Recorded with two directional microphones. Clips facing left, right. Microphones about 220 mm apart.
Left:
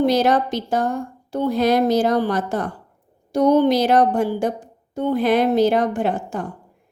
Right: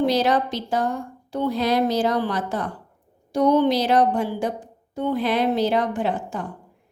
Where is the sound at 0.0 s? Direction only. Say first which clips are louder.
Left 3 dB; 45° left (ahead or behind).